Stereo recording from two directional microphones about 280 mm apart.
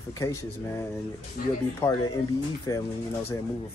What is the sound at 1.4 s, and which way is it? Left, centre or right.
Speech, left.